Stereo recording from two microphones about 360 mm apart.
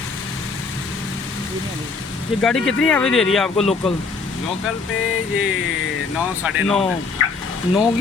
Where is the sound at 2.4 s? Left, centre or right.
Centre.